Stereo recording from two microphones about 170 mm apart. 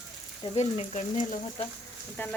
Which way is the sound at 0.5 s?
40° left (ahead or behind).